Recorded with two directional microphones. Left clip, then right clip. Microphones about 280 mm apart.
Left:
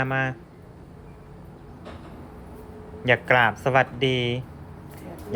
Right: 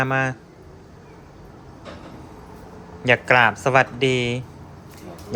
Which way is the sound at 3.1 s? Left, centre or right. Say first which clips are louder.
Right 3 dB; centre.